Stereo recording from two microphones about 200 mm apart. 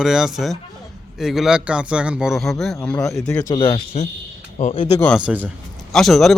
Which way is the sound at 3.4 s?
20° left (ahead or behind).